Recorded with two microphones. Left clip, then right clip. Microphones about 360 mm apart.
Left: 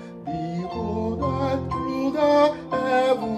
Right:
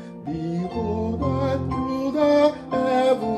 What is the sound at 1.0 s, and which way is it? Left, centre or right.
Music, left.